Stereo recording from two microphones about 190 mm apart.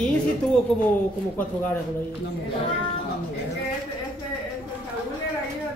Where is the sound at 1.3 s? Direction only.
10° left (ahead or behind).